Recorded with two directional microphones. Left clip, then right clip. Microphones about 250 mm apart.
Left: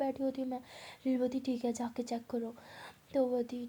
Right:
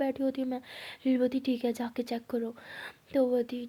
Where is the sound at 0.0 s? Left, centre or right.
Right.